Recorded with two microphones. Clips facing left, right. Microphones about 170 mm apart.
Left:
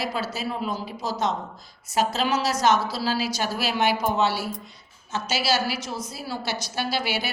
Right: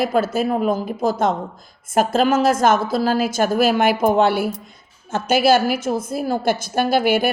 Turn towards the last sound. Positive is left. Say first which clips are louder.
# right 11 dB
turn(degrees=-50)  # may be behind; listen again after turning